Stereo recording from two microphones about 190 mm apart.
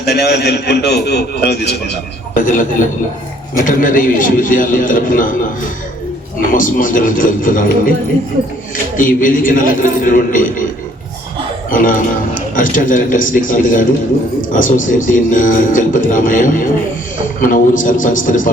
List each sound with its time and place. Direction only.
0.0 s a man's voice: 60° left (ahead or behind)
2.3 s speech: 45° left (ahead or behind)
6.5 s speech: 45° left (ahead or behind)
9.0 s speech: 45° left (ahead or behind)
11.7 s speech: 45° left (ahead or behind)